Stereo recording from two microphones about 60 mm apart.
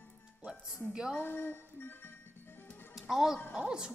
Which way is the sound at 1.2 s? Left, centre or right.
Left.